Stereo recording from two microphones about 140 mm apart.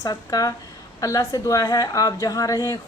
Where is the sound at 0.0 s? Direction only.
25° left (ahead or behind).